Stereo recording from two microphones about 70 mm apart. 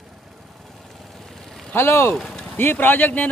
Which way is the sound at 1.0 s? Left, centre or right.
Centre.